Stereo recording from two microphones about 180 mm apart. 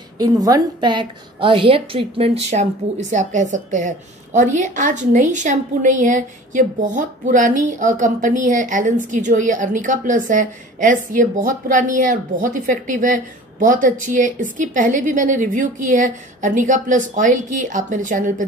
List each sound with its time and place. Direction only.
0.2 s a woman's voice: 20° right (ahead or behind); by 18.3 s 45° right (ahead or behind)